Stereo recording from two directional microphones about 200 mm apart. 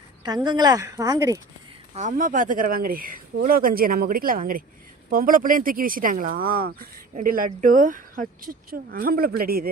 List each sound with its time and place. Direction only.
0.2 s speech: 20° right (ahead or behind)
1.9 s speech: 40° right (ahead or behind)